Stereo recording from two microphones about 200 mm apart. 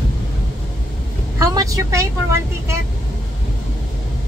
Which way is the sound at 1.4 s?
15° right (ahead or behind).